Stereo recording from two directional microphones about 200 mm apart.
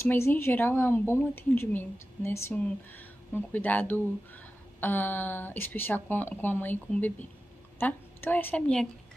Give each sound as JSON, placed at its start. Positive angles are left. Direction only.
{"t": 0.0, "sound": "a woman's voice", "side_deg": 10}